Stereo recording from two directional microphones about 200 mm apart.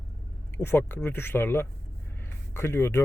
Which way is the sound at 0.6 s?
10° left (ahead or behind).